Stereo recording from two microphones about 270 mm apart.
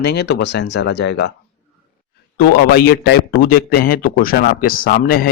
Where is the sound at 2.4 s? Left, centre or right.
Left.